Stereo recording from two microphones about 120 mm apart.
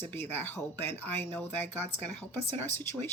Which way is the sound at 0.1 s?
15° left (ahead or behind).